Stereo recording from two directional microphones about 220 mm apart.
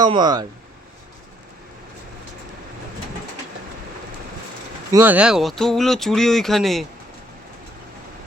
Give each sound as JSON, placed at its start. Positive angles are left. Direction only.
{"t": 0.0, "sound": "speech", "side_deg": -20}
{"t": 4.9, "sound": "speech", "side_deg": -10}